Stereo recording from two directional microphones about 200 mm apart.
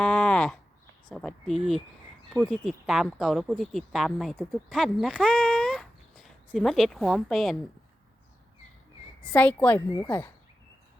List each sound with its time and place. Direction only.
0.0 s a sound: 5° left (ahead or behind)
1.1 s speech: centre (ahead or behind)
9.3 s a woman's voice: 5° left (ahead or behind)